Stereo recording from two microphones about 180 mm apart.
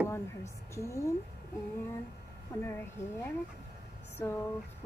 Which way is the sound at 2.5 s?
20° left (ahead or behind).